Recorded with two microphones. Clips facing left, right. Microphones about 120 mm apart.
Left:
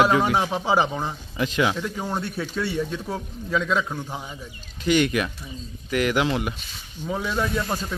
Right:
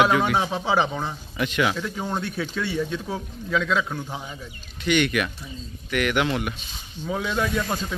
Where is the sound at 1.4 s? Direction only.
25° left (ahead or behind).